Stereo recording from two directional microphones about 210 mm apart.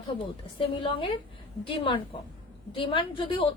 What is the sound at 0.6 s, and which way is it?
A woman's voice, 25° left (ahead or behind).